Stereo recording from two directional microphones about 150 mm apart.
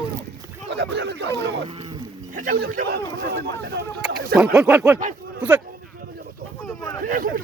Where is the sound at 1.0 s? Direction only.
90° right.